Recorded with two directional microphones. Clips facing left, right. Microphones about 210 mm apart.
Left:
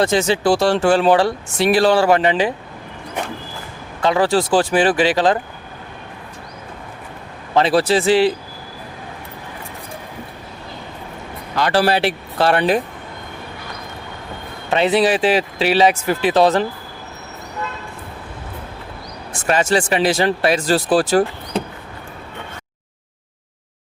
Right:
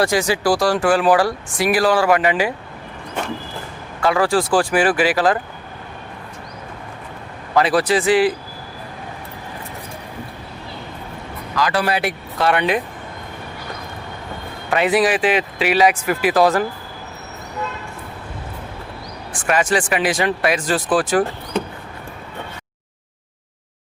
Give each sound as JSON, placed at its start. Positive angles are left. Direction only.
{"t": 0.0, "sound": "speech", "side_deg": 25}
{"t": 3.2, "sound": "a sound", "side_deg": 15}
{"t": 4.0, "sound": "speech", "side_deg": 25}
{"t": 7.5, "sound": "speech", "side_deg": 30}
{"t": 11.5, "sound": "speech", "side_deg": 30}
{"t": 14.7, "sound": "speech", "side_deg": 25}
{"t": 19.3, "sound": "speech", "side_deg": 25}